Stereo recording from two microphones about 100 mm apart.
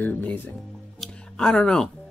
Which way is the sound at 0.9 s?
5° left (ahead or behind).